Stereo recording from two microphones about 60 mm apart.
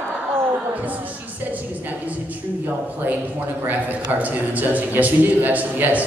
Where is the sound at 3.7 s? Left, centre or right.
Right.